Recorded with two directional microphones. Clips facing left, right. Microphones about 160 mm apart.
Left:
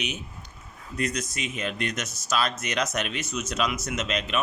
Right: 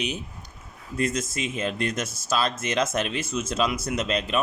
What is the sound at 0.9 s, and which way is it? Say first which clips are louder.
Speech: right 3 dB; 25° right (ahead or behind).